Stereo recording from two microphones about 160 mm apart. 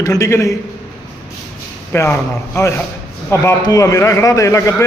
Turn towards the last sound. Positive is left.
turn(degrees=20)  # may be behind; listen again after turning